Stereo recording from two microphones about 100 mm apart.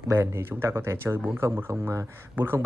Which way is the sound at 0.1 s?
25° right (ahead or behind).